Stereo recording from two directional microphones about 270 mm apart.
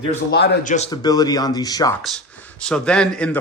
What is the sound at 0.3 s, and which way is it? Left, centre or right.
Speech, left.